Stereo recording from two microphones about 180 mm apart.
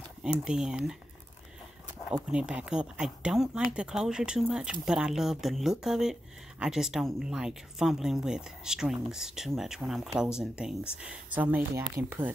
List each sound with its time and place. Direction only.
0.2 s speech: 5° right (ahead or behind)
2.3 s speech: 5° right (ahead or behind)